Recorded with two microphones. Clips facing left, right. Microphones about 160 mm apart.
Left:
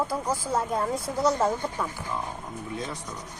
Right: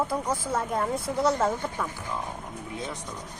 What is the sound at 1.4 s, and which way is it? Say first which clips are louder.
Speech: left 1 dB; 30° left (ahead or behind).